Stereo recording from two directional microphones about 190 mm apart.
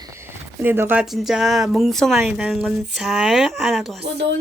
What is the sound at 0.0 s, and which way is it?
Speech, 15° right (ahead or behind).